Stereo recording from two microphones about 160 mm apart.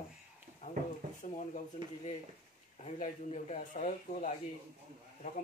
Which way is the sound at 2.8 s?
40° left (ahead or behind).